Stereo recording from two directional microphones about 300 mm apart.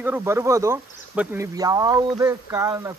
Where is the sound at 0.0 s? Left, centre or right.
Centre.